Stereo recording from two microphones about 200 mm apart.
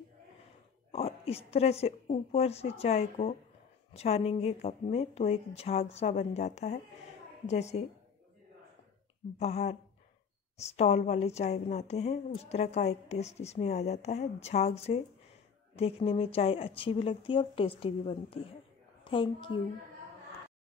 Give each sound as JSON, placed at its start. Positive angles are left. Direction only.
{"t": 0.9, "sound": "speech", "side_deg": 30}
{"t": 9.4, "sound": "speech", "side_deg": 35}